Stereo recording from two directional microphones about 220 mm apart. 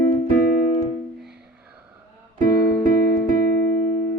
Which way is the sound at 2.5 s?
15° left (ahead or behind).